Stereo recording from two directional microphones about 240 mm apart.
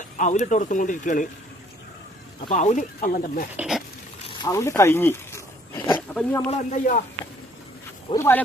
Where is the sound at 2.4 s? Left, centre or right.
Left.